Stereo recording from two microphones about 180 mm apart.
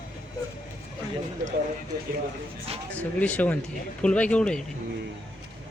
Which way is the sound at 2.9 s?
10° left (ahead or behind).